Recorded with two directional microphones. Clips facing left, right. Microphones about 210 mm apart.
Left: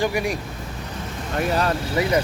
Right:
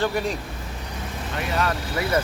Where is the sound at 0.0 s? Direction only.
10° left (ahead or behind).